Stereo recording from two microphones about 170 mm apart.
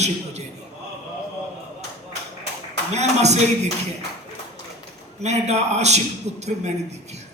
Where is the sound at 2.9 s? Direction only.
40° right (ahead or behind).